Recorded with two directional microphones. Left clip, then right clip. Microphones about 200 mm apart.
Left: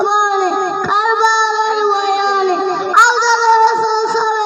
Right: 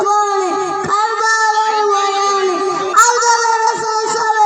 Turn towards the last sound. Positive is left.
turn(degrees=-40)  # may be behind; listen again after turning